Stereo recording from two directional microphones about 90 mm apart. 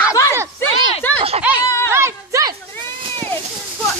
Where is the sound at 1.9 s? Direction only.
30° right (ahead or behind).